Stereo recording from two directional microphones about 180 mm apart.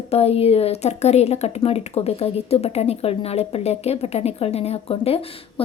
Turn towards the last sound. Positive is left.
turn(degrees=30)  # may be behind; listen again after turning